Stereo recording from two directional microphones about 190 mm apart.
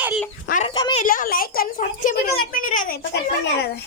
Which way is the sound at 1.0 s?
45° left (ahead or behind).